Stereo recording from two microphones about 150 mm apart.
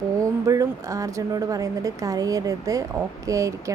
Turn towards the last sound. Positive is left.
turn(degrees=-20)  # may be behind; listen again after turning